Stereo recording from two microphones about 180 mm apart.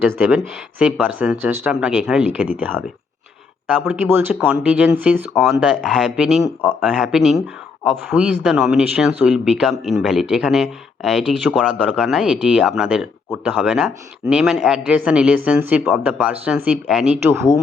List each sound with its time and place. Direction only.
0.3 s speech: 5° right (ahead or behind)
3.8 s speech: 10° right (ahead or behind)
5.3 s speech: centre (ahead or behind)